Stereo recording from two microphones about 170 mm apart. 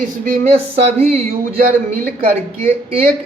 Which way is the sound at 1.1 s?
40° right (ahead or behind).